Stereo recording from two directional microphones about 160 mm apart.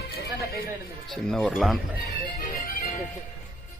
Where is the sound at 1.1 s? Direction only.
Centre (ahead or behind).